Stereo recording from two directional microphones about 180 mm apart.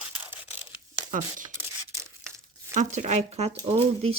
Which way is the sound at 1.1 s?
45° right (ahead or behind).